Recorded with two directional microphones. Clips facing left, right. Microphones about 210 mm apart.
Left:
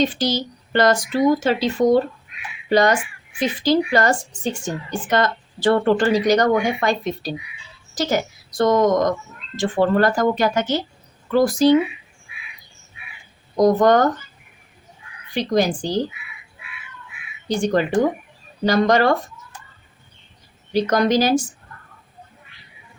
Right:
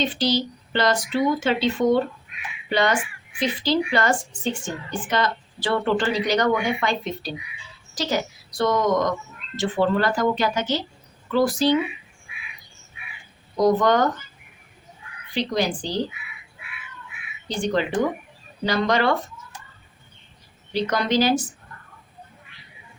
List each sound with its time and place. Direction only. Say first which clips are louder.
0.0 s a woman's voice: left 2 dB; 45° left (ahead or behind)
8.5 s a woman's voice: left 4 dB; 45° left (ahead or behind)
13.6 s a woman's voice: left 4 dB; 45° left (ahead or behind)
15.4 s a woman's voice: left 4 dB; 45° left (ahead or behind)
17.5 s a woman's voice: left 5 dB; 45° left (ahead or behind)
20.7 s a woman's voice: left 4 dB; 45° left (ahead or behind)